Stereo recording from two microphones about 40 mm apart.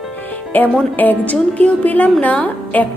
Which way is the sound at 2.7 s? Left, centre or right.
Left.